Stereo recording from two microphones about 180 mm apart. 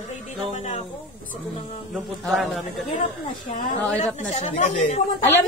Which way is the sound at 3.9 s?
35° left (ahead or behind).